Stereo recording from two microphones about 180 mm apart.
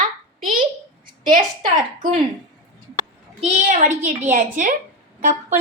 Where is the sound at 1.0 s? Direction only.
50° right (ahead or behind).